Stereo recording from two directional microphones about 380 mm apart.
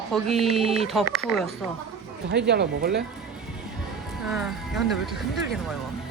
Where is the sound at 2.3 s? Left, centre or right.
Right.